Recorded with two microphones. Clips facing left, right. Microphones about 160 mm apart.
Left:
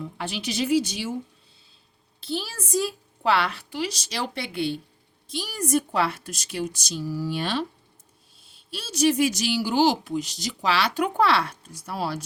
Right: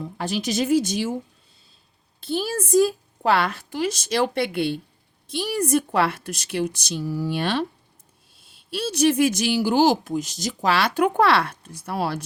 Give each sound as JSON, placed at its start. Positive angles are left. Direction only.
{"t": 0.0, "sound": "speech", "side_deg": -40}
{"t": 2.2, "sound": "a woman's voice", "side_deg": -50}